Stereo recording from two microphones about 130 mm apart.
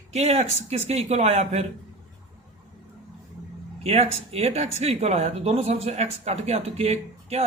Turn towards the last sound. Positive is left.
turn(degrees=-55)  # may be behind; listen again after turning